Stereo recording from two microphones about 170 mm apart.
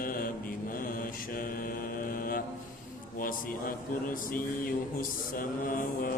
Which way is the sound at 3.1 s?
55° left (ahead or behind).